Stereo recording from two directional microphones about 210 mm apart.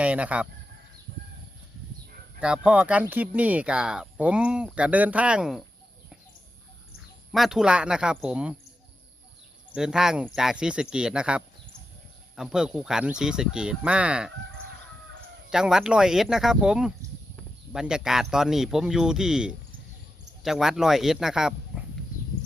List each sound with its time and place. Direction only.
0.0 s speech: 5° right (ahead or behind)
2.4 s speech: 5° right (ahead or behind)
7.3 s speech: centre (ahead or behind)
9.7 s speech: 5° right (ahead or behind)
15.4 s speech: 5° right (ahead or behind)